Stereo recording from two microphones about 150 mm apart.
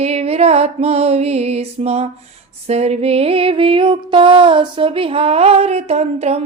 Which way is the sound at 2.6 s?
45° right (ahead or behind).